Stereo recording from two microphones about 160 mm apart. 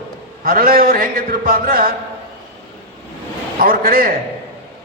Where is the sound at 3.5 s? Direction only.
65° right (ahead or behind).